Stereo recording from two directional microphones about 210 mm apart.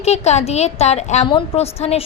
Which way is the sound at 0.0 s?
30° left (ahead or behind).